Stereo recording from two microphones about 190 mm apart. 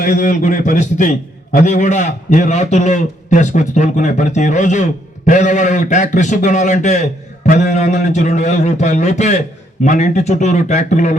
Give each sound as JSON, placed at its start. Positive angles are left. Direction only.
{"t": 0.0, "sound": "a man's voice", "side_deg": 40}